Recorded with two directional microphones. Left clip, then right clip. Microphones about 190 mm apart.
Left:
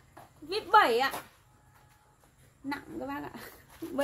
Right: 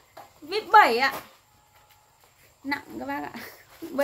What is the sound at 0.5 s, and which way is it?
Speech, 10° left (ahead or behind).